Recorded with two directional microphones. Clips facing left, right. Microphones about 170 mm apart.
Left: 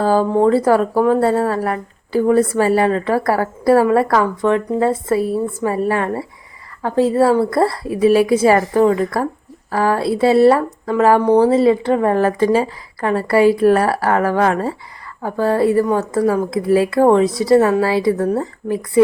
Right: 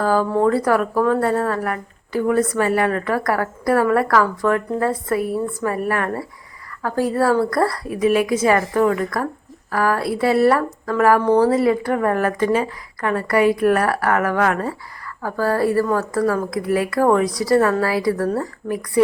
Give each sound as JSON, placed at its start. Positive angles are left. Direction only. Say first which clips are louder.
{"t": 0.0, "sound": "speech", "louder": "left 3 dB", "side_deg": 30}